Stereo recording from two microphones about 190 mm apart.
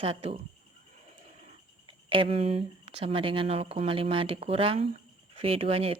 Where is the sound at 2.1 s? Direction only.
30° right (ahead or behind).